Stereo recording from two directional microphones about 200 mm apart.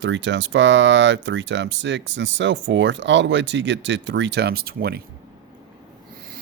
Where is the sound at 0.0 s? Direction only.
65° right (ahead or behind).